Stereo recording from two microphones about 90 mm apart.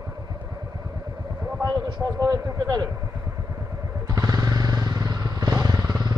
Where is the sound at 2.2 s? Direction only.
45° right (ahead or behind).